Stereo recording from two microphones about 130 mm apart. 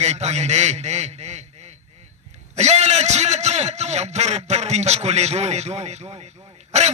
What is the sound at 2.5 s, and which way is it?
A man's voice, 60° right (ahead or behind).